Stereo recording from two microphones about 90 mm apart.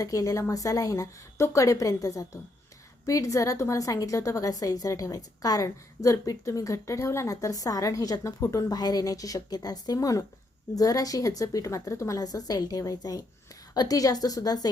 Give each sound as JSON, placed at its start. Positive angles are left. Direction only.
{"t": 0.0, "sound": "a woman's voice", "side_deg": 40}